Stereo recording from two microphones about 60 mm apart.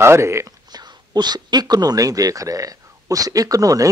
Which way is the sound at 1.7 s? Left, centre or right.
Right.